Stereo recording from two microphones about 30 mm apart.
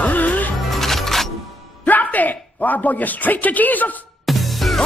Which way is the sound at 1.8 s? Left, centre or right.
Left.